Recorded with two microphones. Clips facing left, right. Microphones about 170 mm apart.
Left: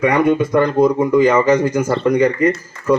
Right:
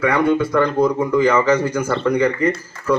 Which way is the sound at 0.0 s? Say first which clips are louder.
Left 2 dB; 20° left (ahead or behind).